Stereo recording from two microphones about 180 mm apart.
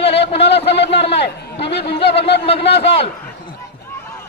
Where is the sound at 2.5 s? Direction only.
30° left (ahead or behind).